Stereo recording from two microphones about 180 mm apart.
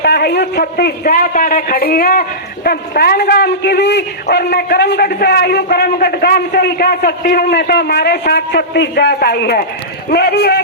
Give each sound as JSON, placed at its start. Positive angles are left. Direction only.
{"t": 0.0, "sound": "a man's voice", "side_deg": 65}